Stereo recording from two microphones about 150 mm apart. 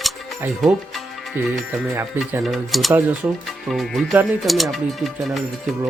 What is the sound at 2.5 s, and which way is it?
Speech, centre (ahead or behind).